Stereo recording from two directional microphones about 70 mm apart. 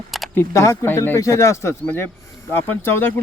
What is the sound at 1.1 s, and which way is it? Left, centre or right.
Speech, left.